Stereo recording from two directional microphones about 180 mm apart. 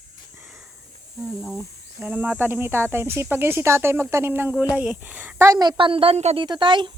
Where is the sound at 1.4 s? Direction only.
Centre (ahead or behind).